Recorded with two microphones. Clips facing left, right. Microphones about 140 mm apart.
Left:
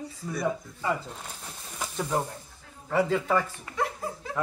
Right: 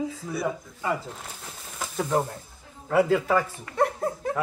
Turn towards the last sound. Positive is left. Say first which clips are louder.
# right 6 dB
turn(degrees=-55)  # may be behind; listen again after turning